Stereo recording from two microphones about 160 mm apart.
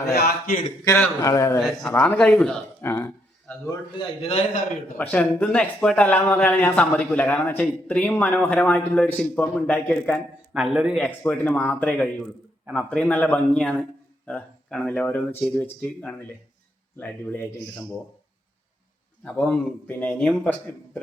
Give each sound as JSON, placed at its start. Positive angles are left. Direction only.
{"t": 0.1, "sound": "a man's voice", "side_deg": 80}
{"t": 0.9, "sound": "a man's voice", "side_deg": 15}
{"t": 1.9, "sound": "speech", "side_deg": 10}
{"t": 4.2, "sound": "a man's voice", "side_deg": 45}
{"t": 4.9, "sound": "speech", "side_deg": 10}
{"t": 10.5, "sound": "a man's voice", "side_deg": -5}
{"t": 11.0, "sound": "speech", "side_deg": 10}
{"t": 19.2, "sound": "speech", "side_deg": 10}